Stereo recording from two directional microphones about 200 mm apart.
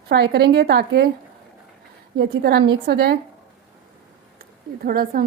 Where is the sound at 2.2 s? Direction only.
50° right (ahead or behind).